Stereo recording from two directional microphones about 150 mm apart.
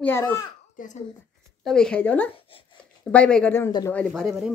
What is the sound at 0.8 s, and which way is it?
Speech, 55° left (ahead or behind).